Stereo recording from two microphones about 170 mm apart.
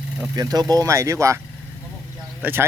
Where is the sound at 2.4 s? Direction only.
15° right (ahead or behind).